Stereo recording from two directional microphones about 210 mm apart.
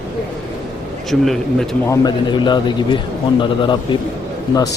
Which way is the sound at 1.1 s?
Centre (ahead or behind).